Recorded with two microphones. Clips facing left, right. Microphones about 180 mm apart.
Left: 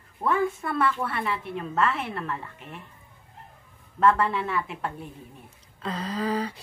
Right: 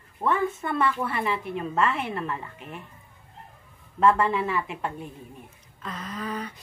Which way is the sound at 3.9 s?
5° right (ahead or behind).